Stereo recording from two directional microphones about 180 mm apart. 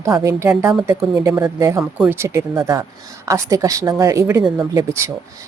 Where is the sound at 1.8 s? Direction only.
5° right (ahead or behind).